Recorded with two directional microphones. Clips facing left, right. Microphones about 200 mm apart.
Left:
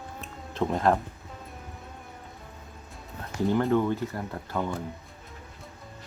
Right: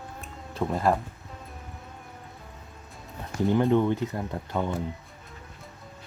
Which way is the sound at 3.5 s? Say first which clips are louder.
Right 2 dB; 15° right (ahead or behind).